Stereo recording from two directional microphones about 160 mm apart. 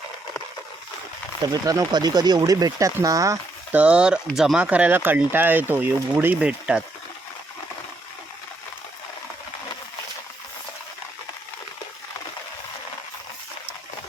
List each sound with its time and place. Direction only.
1.6 s speech: 20° right (ahead or behind)
3.8 s speech: 5° right (ahead or behind)